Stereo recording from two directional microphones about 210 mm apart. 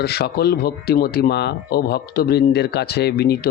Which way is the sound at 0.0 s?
50° left (ahead or behind).